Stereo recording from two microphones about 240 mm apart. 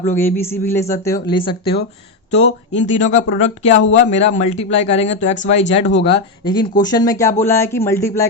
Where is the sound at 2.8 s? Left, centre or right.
Left.